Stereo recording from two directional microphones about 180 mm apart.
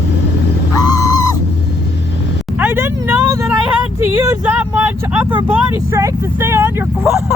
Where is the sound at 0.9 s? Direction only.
20° left (ahead or behind).